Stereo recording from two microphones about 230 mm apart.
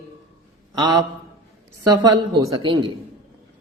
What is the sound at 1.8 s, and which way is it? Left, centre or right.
A woman's voice, centre.